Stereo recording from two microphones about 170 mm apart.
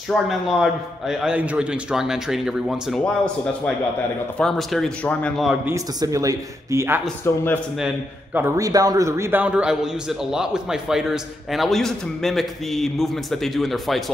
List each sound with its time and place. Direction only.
0.1 s a man's voice: centre (ahead or behind)
4.4 s a man's voice: centre (ahead or behind)
5.9 s speech: 20° right (ahead or behind)
7.3 s a man's voice: 15° left (ahead or behind)
8.4 s a man's voice: 15° right (ahead or behind); by 14.1 s centre (ahead or behind)